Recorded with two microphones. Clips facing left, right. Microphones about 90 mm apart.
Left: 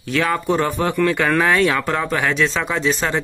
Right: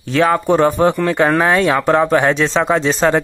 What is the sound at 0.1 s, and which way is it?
Speech, 35° right (ahead or behind).